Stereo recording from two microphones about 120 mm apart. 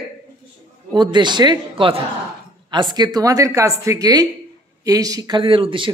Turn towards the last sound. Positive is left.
turn(degrees=-45)  # may be behind; listen again after turning